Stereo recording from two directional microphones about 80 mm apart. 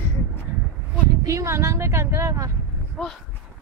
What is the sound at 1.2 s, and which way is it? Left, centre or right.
Speech, right.